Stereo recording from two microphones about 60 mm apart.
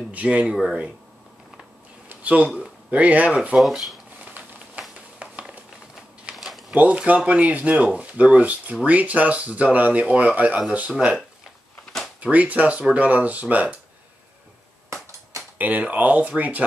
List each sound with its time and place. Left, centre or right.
0.1 s speech: right
2.0 s a sound: right
2.6 s speech: right
3.5 s speech: centre
4.2 s a sound: right
6.3 s a sound: centre
6.7 s speech: right
12.2 s speech: right
15.5 s speech: right